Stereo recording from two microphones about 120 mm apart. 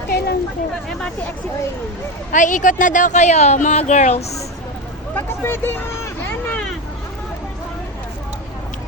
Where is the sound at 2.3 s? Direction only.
90° left; by 4.2 s 75° left (ahead or behind).